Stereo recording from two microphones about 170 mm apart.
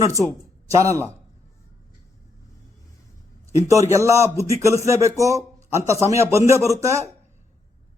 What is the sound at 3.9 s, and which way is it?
Speech, 20° right (ahead or behind).